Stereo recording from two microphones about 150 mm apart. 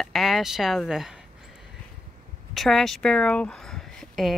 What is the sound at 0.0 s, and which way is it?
Speech, centre (ahead or behind).